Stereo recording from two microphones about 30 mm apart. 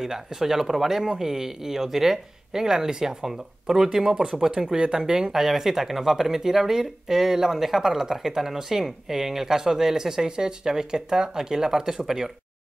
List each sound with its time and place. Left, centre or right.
0.0 s speech: centre